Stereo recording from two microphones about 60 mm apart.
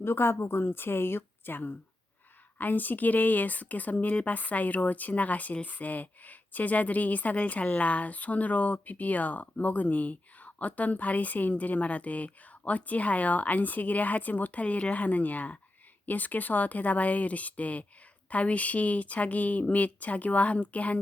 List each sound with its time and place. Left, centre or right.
0.0 s a woman's voice: left